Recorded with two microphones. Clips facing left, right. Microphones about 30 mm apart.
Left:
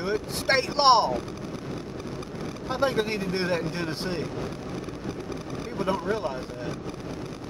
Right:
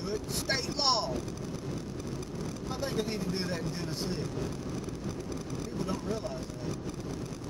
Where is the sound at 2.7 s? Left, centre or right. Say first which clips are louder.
Left 9 dB; left.